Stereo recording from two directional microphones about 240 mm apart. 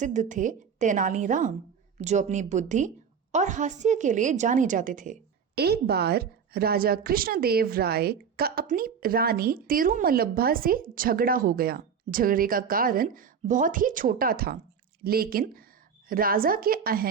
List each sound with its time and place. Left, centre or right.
0.0 s a woman's voice: right